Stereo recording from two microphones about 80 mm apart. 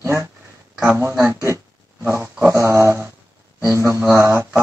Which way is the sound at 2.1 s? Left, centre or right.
Right.